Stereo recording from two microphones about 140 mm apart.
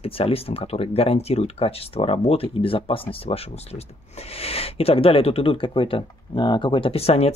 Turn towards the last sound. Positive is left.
turn(degrees=45)  # may be behind; listen again after turning